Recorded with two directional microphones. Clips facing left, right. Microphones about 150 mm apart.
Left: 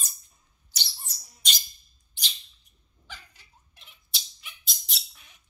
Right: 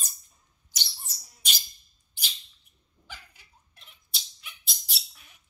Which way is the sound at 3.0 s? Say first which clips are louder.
Even; 10° right (ahead or behind).